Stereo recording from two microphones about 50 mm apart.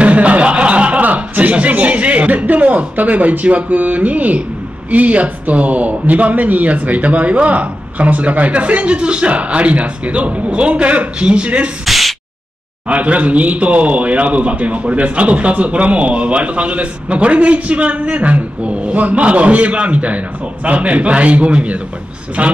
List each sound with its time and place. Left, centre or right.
0.0 s a man's voice: right
11.8 s sneeze: centre
12.8 s a man's voice: right